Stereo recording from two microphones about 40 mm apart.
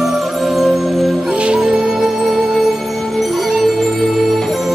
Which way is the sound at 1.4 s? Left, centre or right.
Right.